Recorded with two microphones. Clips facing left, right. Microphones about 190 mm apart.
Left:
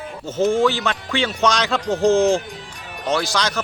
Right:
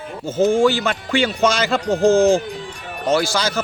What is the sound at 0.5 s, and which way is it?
Speech, centre (ahead or behind).